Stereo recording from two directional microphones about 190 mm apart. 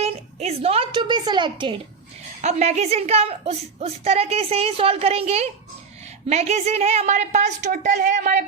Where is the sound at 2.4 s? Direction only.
35° right (ahead or behind).